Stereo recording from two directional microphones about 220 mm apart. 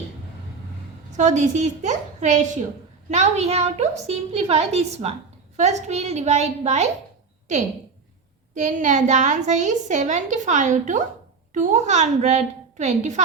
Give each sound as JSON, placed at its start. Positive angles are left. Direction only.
{"t": 1.1, "sound": "a child's voice", "side_deg": -35}